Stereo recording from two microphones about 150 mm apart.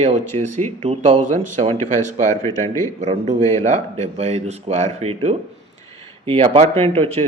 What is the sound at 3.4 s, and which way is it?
Speech, 15° left (ahead or behind).